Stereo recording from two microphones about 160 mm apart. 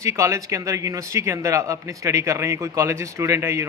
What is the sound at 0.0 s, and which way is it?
Speech, 20° right (ahead or behind).